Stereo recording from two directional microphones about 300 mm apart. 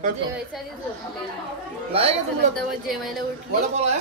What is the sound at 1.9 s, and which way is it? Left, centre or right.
Speech, centre.